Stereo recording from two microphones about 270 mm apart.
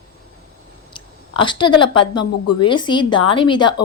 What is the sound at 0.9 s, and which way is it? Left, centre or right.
Speech, centre.